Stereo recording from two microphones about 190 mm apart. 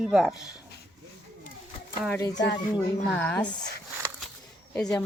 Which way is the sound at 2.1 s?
20° left (ahead or behind).